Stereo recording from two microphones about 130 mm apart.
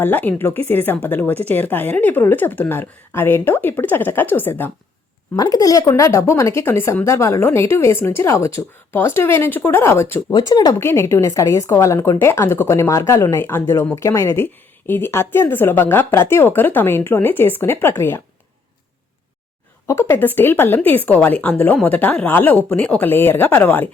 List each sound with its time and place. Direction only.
0.0 s a woman's voice: 15° left (ahead or behind)
5.4 s a woman's voice: 25° left (ahead or behind)
10.3 s a woman's voice: 30° left (ahead or behind)
19.9 s a woman's voice: 20° left (ahead or behind)